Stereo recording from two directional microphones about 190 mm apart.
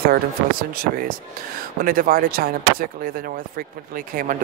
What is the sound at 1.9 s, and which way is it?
Speech, 50° right (ahead or behind).